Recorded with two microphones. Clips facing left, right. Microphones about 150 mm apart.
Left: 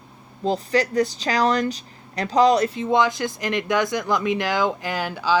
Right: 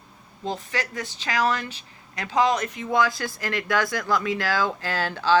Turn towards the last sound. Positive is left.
turn(degrees=10)  # may be behind; listen again after turning